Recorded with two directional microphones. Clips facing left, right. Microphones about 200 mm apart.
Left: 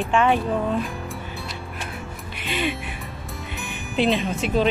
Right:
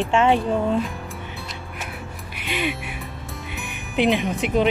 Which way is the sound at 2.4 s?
15° right (ahead or behind).